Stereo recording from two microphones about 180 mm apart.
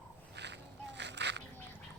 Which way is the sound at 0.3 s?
75° right (ahead or behind).